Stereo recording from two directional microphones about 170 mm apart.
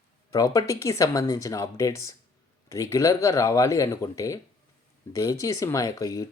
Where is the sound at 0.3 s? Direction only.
20° left (ahead or behind).